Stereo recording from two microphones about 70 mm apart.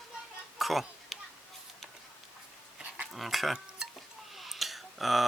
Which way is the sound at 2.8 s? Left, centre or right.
Centre.